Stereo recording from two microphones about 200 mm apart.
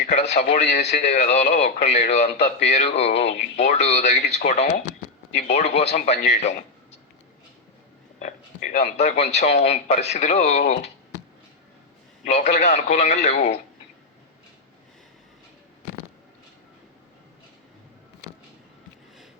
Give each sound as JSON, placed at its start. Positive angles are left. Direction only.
{"t": 0.0, "sound": "speech", "side_deg": 35}
{"t": 8.2, "sound": "speech", "side_deg": 35}
{"t": 12.2, "sound": "speech", "side_deg": 35}